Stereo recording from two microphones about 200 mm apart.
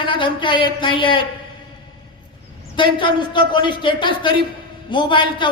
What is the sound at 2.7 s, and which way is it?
Speech, 25° left (ahead or behind).